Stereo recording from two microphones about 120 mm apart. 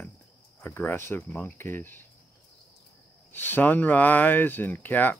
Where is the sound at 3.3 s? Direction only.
15° left (ahead or behind).